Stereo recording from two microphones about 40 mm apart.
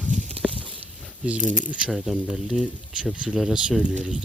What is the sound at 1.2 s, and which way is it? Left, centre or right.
Speech, right.